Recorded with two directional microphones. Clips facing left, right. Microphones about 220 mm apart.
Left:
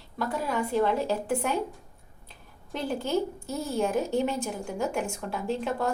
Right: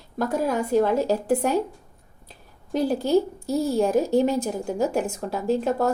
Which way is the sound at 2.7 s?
35° right (ahead or behind).